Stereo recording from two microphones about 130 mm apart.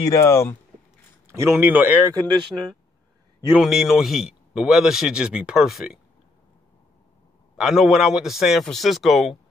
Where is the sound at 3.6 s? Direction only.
Centre (ahead or behind).